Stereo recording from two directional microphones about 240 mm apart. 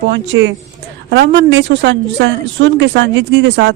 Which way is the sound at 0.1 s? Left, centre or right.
Right.